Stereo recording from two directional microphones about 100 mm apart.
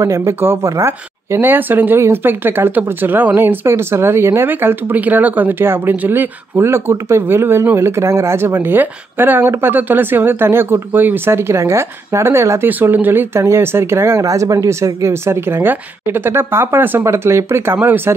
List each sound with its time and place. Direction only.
0.0 s speech: 30° right (ahead or behind)